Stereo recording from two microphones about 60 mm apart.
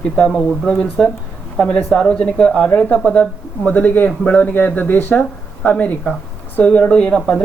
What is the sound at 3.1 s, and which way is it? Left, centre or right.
Speech, left.